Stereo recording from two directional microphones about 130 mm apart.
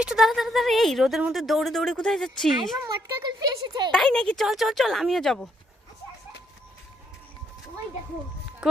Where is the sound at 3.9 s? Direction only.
5° left (ahead or behind).